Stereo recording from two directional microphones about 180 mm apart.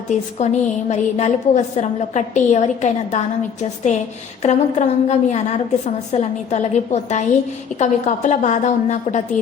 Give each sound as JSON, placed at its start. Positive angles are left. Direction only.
{"t": 0.3, "sound": "a woman's voice", "side_deg": 40}